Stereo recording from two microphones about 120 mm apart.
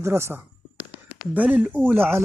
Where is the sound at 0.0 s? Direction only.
20° right (ahead or behind).